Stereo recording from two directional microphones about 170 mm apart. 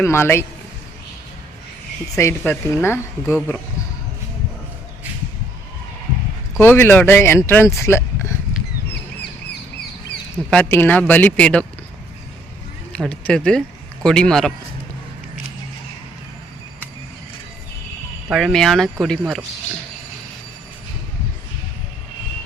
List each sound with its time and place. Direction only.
0.0 s speech: 15° left (ahead or behind)
2.1 s speech: 15° left (ahead or behind)
6.6 s speech: 10° left (ahead or behind)
10.5 s speech: 10° left (ahead or behind)
12.9 s speech: 5° left (ahead or behind)
18.3 s speech: centre (ahead or behind)